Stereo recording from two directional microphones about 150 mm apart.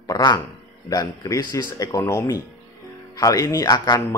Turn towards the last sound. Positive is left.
turn(degrees=25)  # may be behind; listen again after turning